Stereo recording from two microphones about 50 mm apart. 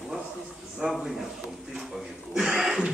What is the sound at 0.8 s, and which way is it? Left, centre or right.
Speech, right.